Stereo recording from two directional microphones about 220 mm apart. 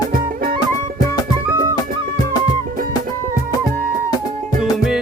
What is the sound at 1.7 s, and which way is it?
Music, 15° left (ahead or behind).